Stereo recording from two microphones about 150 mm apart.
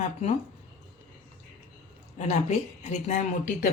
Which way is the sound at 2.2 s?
50° left (ahead or behind).